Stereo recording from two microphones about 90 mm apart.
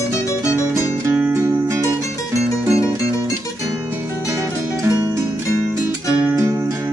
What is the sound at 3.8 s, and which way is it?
Music, 25° right (ahead or behind).